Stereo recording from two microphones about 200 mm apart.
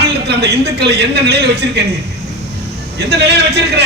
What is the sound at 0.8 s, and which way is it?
Speech, 55° right (ahead or behind).